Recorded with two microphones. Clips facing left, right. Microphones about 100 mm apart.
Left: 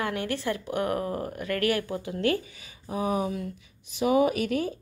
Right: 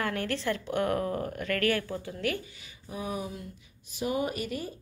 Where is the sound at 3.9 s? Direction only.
75° left (ahead or behind).